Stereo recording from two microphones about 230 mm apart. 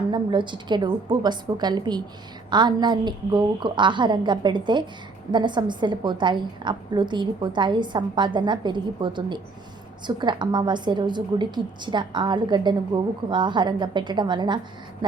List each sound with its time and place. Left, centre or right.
0.1 s a woman's voice: centre